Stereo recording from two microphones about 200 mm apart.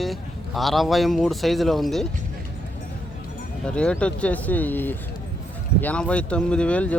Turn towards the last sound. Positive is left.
turn(degrees=5)  # may be behind; listen again after turning